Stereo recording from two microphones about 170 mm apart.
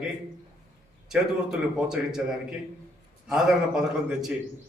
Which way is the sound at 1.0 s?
5° right (ahead or behind).